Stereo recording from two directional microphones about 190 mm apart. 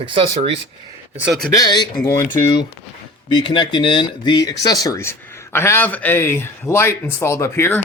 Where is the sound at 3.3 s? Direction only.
30° left (ahead or behind).